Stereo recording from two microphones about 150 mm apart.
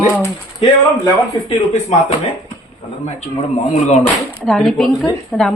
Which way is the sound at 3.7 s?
50° left (ahead or behind).